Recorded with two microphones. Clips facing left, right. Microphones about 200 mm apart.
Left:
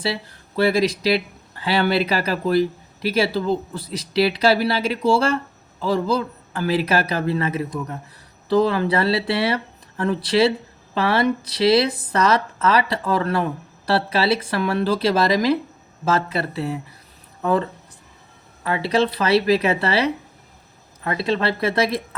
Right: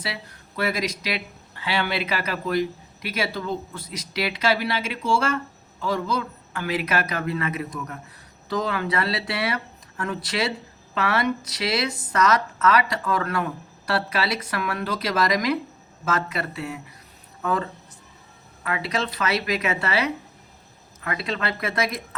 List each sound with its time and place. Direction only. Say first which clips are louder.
0.0 s speech: left 8 dB; 30° left (ahead or behind)